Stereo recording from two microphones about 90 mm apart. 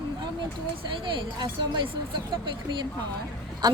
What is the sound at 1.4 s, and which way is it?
Speech, 60° right (ahead or behind).